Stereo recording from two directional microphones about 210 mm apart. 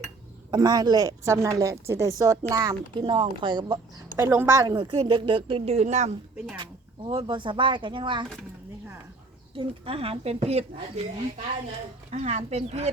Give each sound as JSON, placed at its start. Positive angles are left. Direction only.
{"t": 0.5, "sound": "a woman's voice", "side_deg": -20}
{"t": 6.3, "sound": "speech", "side_deg": -5}
{"t": 6.6, "sound": "a woman's voice", "side_deg": -25}
{"t": 9.6, "sound": "a woman's voice", "side_deg": -25}
{"t": 12.1, "sound": "speech", "side_deg": -30}